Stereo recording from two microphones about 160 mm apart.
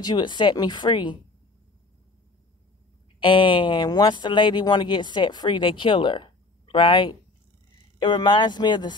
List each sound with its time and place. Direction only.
0.0 s speech: 30° left (ahead or behind)
3.2 s speech: 30° left (ahead or behind)